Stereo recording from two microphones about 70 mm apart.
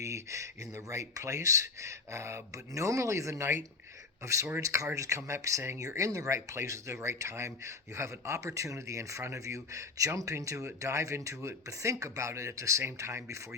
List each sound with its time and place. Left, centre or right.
0.0 s a sound: right
0.9 s speech: right
4.6 s speech: right